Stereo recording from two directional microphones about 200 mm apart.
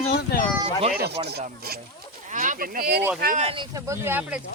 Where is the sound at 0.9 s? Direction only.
55° right (ahead or behind).